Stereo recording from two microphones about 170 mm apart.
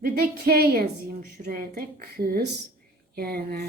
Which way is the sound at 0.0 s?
60° right (ahead or behind).